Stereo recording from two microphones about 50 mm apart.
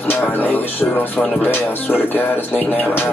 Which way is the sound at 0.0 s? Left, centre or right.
Left.